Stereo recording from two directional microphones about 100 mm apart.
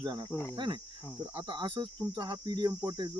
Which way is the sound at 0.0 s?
45° right (ahead or behind).